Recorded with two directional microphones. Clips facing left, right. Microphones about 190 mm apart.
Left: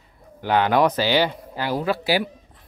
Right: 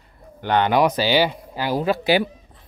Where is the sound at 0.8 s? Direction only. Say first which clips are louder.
Right 1 dB; 15° right (ahead or behind).